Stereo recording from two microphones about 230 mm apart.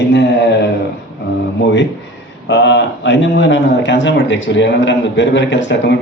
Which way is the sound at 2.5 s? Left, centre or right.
Left.